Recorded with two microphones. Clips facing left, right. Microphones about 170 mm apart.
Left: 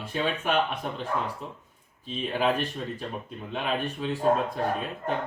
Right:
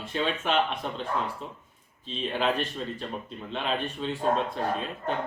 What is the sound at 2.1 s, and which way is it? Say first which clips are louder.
Speech: left 2 dB; 10° left (ahead or behind).